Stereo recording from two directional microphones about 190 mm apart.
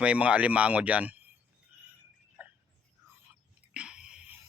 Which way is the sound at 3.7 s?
5° right (ahead or behind).